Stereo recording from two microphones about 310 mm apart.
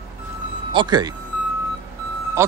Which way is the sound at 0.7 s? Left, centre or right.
Centre.